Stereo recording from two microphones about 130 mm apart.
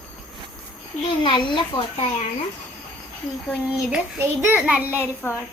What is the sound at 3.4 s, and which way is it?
Speech, 5° right (ahead or behind).